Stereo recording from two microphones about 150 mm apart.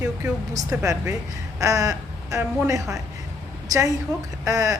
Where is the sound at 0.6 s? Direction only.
20° right (ahead or behind).